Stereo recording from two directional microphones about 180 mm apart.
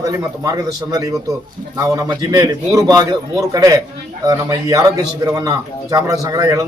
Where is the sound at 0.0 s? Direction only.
20° right (ahead or behind).